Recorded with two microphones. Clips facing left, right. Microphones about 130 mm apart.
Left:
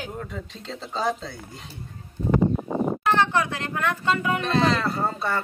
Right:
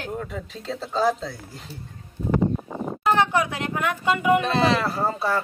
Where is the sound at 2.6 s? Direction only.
45° left (ahead or behind).